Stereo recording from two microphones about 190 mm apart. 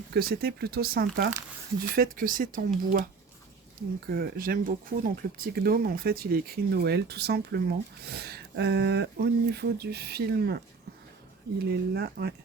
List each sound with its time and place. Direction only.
0.1 s speech: 55° right (ahead or behind)
11.7 s speech: 55° right (ahead or behind)